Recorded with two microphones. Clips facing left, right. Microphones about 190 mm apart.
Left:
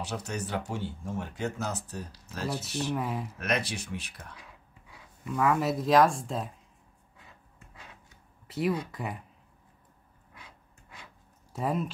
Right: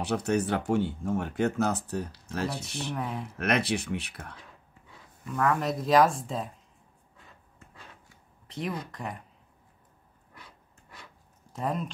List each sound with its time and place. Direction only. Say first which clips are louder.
0.0 s speech: right 8 dB; 55° right (ahead or behind)
2.5 s speech: left 3 dB; 5° left (ahead or behind)
3.3 s speech: right 7 dB; 60° right (ahead or behind)
5.2 s speech: left 1 dB; 5° left (ahead or behind)
8.5 s speech: left 5 dB; 5° left (ahead or behind)
11.5 s speech: left 1 dB; 5° left (ahead or behind)